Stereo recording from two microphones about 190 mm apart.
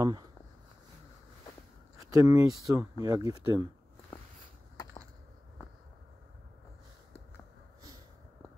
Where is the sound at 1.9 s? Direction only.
15° right (ahead or behind).